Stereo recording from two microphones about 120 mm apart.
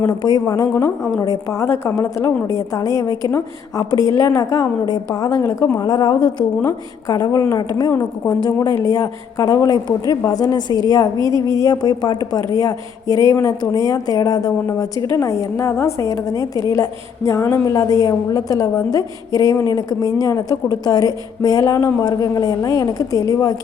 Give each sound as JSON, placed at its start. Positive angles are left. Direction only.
{"t": 0.0, "sound": "a woman's voice", "side_deg": 35}
{"t": 7.9, "sound": "a woman's voice", "side_deg": 20}
{"t": 8.4, "sound": "a woman's voice", "side_deg": 30}